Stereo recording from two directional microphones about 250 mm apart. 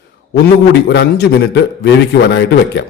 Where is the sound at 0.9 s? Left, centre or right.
Left.